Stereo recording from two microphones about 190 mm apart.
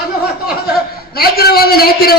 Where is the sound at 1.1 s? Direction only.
55° left (ahead or behind).